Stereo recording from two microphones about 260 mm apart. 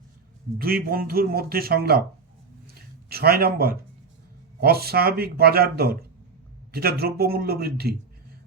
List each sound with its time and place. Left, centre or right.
0.6 s speech: right
3.1 s speech: right